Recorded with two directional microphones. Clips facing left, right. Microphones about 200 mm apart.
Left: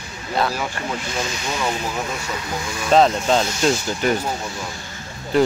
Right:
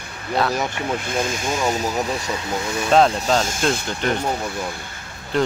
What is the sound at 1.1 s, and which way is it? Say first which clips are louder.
Speech: right 3 dB; 50° right (ahead or behind).